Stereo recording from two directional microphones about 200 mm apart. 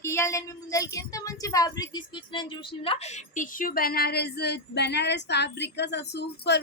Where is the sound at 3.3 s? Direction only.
40° left (ahead or behind).